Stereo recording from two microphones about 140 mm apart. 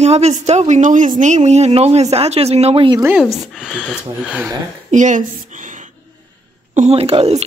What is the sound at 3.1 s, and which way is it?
Speech, centre (ahead or behind).